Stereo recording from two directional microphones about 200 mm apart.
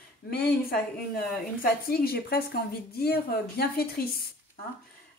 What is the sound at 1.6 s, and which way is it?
A woman's voice, 50° left (ahead or behind).